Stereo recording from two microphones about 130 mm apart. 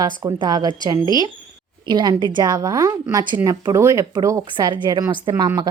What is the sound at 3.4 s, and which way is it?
Speech, 25° right (ahead or behind).